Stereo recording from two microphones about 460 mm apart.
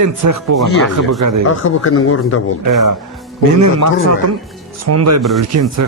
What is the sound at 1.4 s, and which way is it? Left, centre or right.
Speech, left.